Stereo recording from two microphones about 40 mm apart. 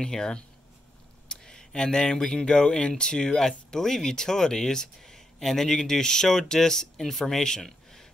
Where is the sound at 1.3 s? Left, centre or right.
Centre.